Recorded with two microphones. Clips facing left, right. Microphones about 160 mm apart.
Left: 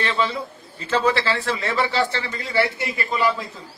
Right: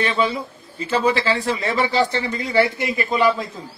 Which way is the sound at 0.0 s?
15° right (ahead or behind).